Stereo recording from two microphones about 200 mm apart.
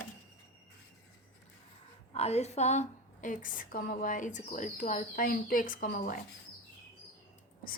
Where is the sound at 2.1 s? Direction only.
30° left (ahead or behind).